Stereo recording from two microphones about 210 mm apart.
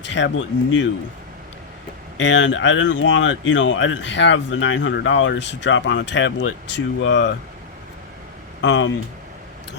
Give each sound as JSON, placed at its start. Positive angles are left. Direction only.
{"t": 0.0, "sound": "speech", "side_deg": 60}
{"t": 2.1, "sound": "speech", "side_deg": 60}
{"t": 8.6, "sound": "speech", "side_deg": 60}